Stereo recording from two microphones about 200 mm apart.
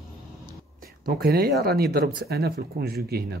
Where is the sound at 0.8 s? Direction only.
50° right (ahead or behind).